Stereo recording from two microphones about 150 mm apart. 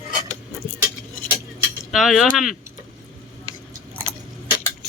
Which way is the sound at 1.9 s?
Centre (ahead or behind).